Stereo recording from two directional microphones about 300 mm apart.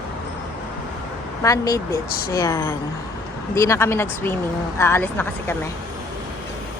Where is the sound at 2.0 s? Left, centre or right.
Left.